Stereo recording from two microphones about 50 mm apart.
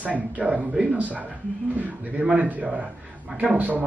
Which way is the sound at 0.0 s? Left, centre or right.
Right.